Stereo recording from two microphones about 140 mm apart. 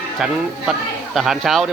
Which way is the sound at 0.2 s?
5° right (ahead or behind).